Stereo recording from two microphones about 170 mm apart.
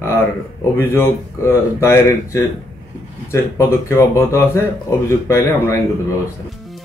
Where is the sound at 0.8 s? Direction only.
15° left (ahead or behind).